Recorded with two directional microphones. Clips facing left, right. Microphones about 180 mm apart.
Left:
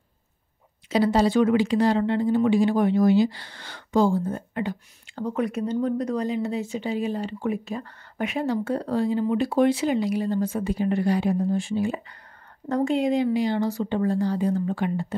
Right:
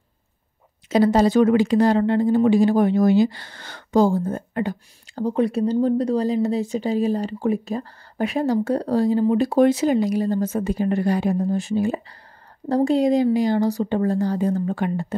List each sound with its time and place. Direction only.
0.8 s speech: 45° right (ahead or behind)